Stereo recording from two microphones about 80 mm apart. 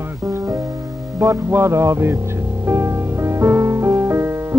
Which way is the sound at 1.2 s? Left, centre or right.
Right.